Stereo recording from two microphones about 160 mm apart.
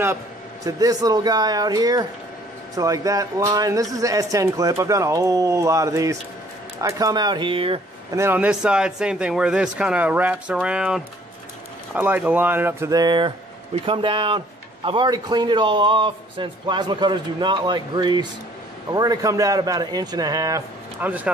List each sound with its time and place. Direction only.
0.7 s speech: 20° right (ahead or behind)
8.1 s speech: 15° right (ahead or behind)
21.0 s speech: 10° right (ahead or behind)